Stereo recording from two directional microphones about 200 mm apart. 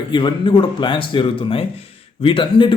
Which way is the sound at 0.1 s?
25° left (ahead or behind).